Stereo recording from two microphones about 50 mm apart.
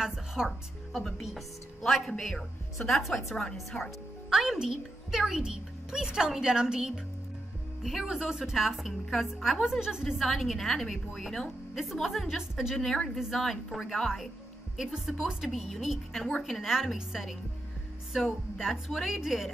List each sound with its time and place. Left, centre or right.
0.1 s music: centre
0.9 s a woman's voice: centre
3.7 s speech: left
4.3 s a woman's voice: centre
10.2 s a woman's voice: centre
12.7 s a woman's voice: centre